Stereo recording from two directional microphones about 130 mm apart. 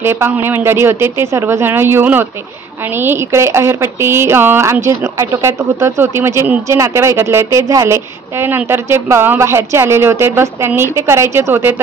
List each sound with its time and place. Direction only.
0.0 s speech: 20° right (ahead or behind)